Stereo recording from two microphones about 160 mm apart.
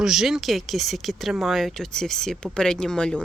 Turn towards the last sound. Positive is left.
turn(degrees=5)  # may be behind; listen again after turning